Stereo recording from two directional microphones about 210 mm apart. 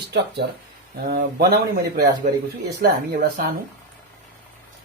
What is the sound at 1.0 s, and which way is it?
Speech, 45° right (ahead or behind).